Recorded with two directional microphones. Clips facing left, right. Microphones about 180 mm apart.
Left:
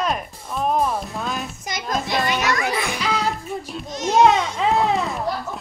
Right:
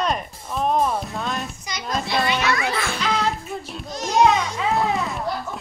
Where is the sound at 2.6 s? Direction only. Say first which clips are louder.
Left 1 dB; 15° left (ahead or behind).